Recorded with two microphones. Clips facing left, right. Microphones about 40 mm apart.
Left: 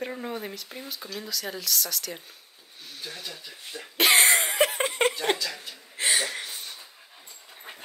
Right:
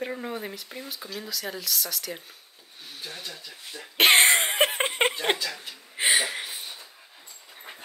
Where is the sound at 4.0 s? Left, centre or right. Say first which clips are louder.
Right 2 dB; right.